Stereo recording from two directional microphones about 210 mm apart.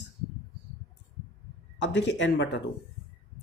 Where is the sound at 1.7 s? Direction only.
60° left (ahead or behind).